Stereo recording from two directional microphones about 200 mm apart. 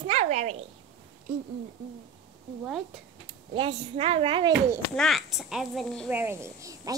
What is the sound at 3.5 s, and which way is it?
A child's voice, 25° right (ahead or behind).